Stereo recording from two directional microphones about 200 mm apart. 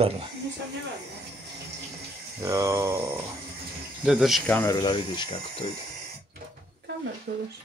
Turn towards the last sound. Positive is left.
turn(degrees=-50)  # may be behind; listen again after turning